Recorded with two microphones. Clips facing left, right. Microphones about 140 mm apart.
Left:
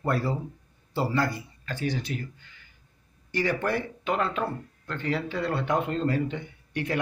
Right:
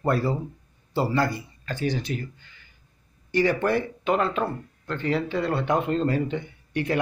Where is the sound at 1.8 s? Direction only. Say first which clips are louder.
Right 3 dB; 25° right (ahead or behind).